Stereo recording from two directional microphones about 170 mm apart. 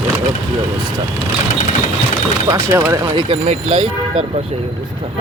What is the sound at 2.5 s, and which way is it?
Speech, 15° right (ahead or behind).